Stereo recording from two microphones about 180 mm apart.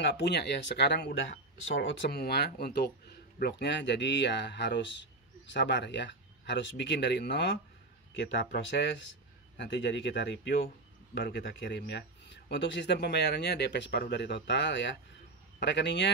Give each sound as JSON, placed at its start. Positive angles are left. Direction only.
{"t": 0.0, "sound": "speech", "side_deg": 70}
{"t": 8.2, "sound": "speech", "side_deg": 85}